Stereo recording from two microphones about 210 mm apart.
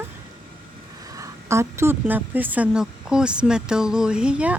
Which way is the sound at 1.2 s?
15° right (ahead or behind).